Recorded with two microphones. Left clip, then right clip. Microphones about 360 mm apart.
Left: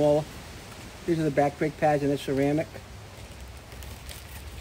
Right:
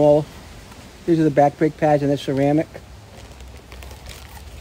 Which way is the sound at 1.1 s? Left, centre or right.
Right.